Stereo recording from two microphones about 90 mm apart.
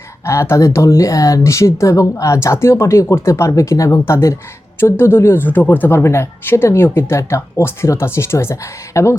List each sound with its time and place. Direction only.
0.3 s speech: 35° left (ahead or behind)